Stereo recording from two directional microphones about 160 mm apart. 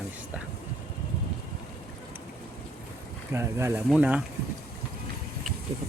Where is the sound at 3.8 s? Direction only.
5° right (ahead or behind).